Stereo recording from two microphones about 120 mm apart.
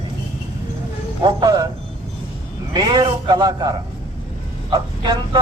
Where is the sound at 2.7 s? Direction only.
40° right (ahead or behind).